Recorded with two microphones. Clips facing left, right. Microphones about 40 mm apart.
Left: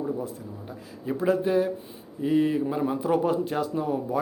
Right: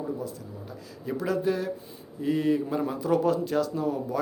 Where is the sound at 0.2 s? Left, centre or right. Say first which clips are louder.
Left 2 dB; left.